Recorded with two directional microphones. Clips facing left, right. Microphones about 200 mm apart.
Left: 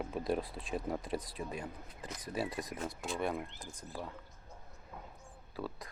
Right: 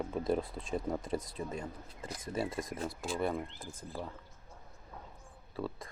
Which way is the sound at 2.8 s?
Centre (ahead or behind).